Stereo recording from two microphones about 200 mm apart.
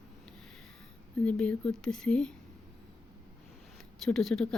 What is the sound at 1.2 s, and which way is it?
Speech, 5° left (ahead or behind).